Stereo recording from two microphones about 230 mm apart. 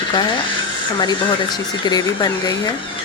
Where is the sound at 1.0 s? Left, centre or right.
Centre.